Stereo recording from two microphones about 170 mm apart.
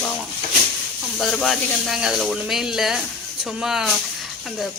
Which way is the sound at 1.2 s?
Centre (ahead or behind).